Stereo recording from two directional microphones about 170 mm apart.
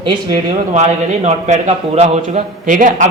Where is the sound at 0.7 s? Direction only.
40° right (ahead or behind).